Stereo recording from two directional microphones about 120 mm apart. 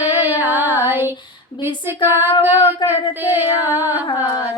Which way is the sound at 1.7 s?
20° right (ahead or behind).